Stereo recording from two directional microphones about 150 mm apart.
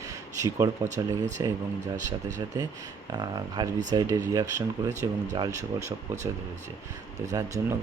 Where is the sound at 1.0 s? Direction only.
25° right (ahead or behind).